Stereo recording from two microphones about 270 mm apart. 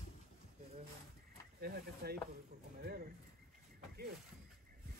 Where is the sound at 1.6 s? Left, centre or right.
Right.